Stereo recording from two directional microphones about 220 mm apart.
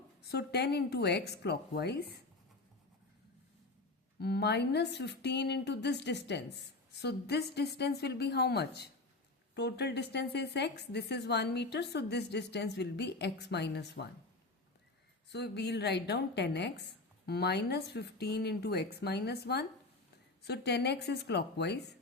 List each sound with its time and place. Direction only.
0.2 s a woman's voice: 50° left (ahead or behind)
4.2 s a woman's voice: 50° left (ahead or behind)
15.3 s a woman's voice: 50° left (ahead or behind)